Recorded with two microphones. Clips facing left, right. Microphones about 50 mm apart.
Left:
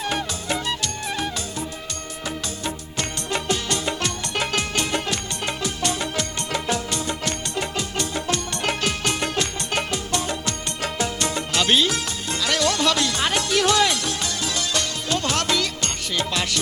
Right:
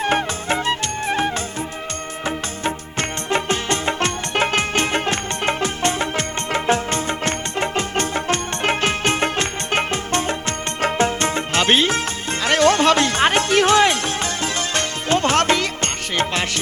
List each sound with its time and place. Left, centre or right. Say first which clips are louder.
0.0 s music: right 6 dB; right